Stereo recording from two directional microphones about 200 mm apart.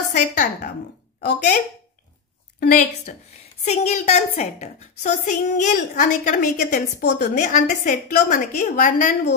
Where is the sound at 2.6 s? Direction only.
40° left (ahead or behind).